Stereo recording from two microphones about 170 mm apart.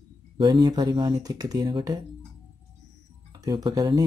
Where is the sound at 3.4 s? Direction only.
25° right (ahead or behind).